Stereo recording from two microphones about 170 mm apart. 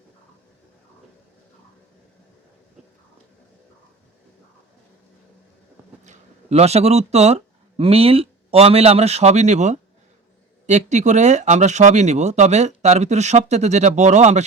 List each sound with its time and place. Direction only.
6.1 s speech: 40° right (ahead or behind)